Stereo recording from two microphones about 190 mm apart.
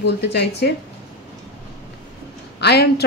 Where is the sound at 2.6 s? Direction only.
60° left (ahead or behind).